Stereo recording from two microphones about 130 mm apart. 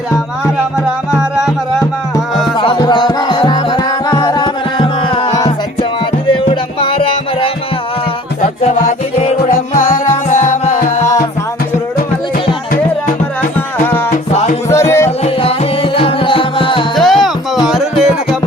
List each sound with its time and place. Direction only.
2.6 s music: 40° left (ahead or behind)
6.3 s music: 45° left (ahead or behind)
9.5 s music: 90° left; by 11.0 s 65° left (ahead or behind)
14.7 s music: 20° left (ahead or behind)
15.2 s music: 45° left (ahead or behind)
16.9 s music: centre (ahead or behind)